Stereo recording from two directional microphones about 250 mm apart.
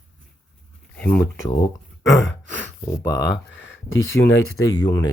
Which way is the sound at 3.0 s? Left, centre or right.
Left.